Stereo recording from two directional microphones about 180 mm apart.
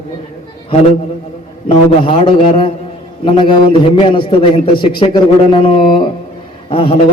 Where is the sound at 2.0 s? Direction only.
30° left (ahead or behind).